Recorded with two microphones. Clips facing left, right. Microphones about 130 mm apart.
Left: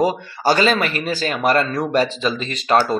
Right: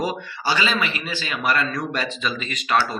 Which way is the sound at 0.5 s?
45° left (ahead or behind).